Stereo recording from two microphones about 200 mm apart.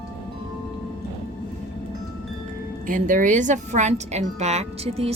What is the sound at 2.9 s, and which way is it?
A woman's voice, 40° right (ahead or behind).